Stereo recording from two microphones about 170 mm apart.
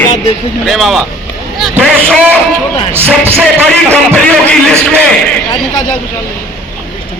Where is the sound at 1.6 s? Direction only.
5° left (ahead or behind).